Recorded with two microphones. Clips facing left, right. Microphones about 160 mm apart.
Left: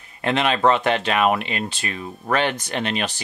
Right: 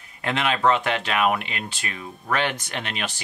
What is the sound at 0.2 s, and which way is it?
Speech, 30° left (ahead or behind).